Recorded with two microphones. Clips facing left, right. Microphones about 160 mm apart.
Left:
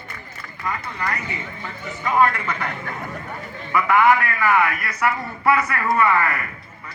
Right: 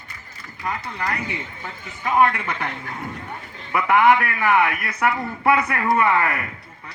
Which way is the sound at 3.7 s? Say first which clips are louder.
Even; 25° right (ahead or behind).